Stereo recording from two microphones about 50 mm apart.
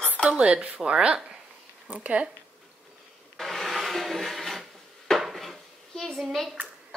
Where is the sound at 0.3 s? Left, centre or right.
Right.